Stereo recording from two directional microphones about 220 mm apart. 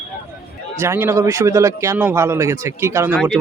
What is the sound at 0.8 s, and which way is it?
Speech, 10° right (ahead or behind).